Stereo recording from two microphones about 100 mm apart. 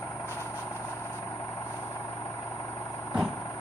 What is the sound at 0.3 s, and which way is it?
Vehicle, 25° left (ahead or behind).